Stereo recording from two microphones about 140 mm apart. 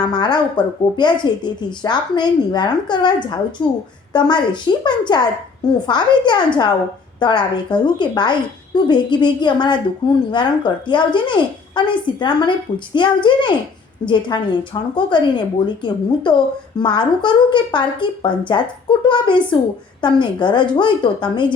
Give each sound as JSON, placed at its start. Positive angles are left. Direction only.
{"t": 0.0, "sound": "a woman's voice", "side_deg": 30}